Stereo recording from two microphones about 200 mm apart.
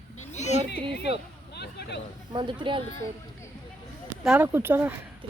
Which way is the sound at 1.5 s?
55° left (ahead or behind).